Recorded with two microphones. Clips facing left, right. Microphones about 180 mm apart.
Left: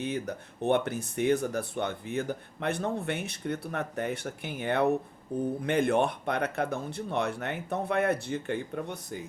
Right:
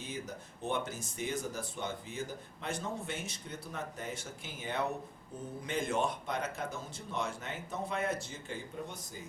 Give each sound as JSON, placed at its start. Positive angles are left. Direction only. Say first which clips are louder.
{"t": 0.0, "sound": "speech", "louder": "left 9 dB", "side_deg": 65}